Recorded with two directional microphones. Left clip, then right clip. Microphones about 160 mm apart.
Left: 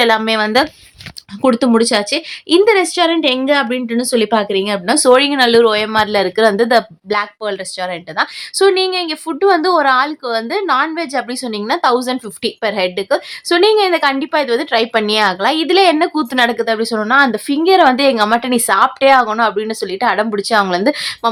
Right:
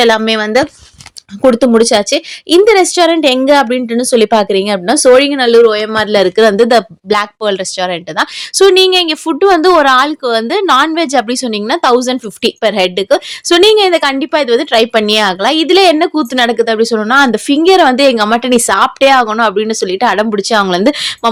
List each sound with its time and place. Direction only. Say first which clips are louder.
0.0 s speech: right 3 dB; 25° right (ahead or behind)
1.4 s a woman's voice: right 5 dB; 25° right (ahead or behind)
6.0 s a woman's voice: right 5 dB; 25° right (ahead or behind)